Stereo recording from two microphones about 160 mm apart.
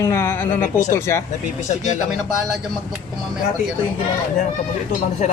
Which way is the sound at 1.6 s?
50° left (ahead or behind).